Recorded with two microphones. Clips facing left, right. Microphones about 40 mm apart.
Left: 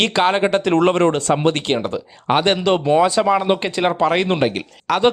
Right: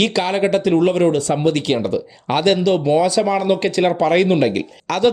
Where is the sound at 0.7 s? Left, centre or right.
Left; by 5.0 s centre.